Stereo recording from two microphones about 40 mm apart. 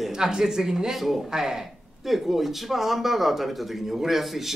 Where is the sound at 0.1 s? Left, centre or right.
Centre.